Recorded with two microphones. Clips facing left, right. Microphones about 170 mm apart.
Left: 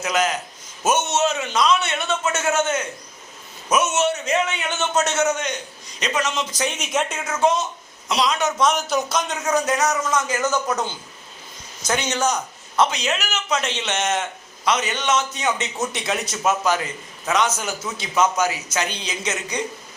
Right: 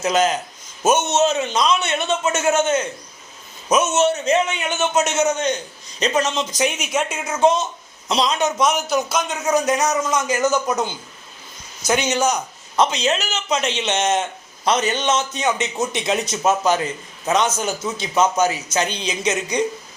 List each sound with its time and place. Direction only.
0.0 s a man's voice: 25° right (ahead or behind)
6.0 s a man's voice: 30° right (ahead or behind)
6.5 s a man's voice: 15° right (ahead or behind)
6.7 s a woman's voice: centre (ahead or behind)
7.3 s a man's voice: 20° right (ahead or behind)
8.9 s a man's voice: centre (ahead or behind); by 19.6 s 20° right (ahead or behind)